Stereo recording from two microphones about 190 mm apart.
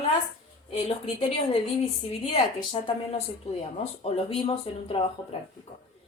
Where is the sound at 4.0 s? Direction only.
30° left (ahead or behind).